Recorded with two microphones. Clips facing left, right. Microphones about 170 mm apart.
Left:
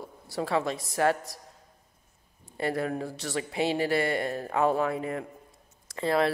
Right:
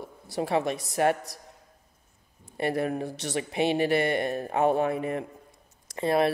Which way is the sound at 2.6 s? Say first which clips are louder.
Right 2 dB; 25° right (ahead or behind).